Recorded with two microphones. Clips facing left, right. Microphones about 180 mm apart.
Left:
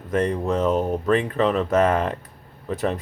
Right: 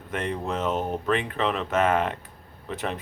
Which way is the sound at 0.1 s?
40° left (ahead or behind).